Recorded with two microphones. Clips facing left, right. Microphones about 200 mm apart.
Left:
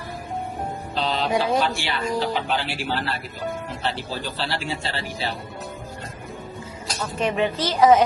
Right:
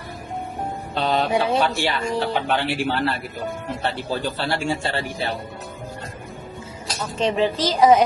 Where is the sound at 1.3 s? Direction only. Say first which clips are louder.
Right 1 dB; 25° right (ahead or behind).